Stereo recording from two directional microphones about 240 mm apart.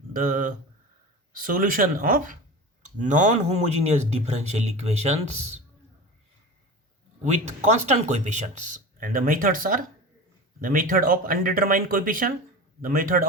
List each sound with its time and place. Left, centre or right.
0.1 s speech: right
7.3 s speech: right